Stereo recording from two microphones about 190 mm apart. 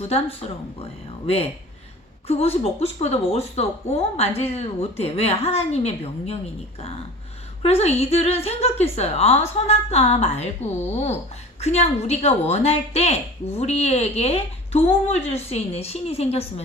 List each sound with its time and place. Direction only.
0.1 s a woman's voice: 30° left (ahead or behind)
2.2 s a woman's voice: 30° left (ahead or behind)